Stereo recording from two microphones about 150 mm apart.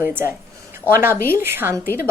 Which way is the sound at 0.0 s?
15° right (ahead or behind).